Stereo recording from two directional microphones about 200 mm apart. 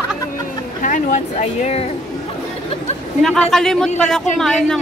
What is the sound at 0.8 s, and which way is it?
Speech, 40° left (ahead or behind).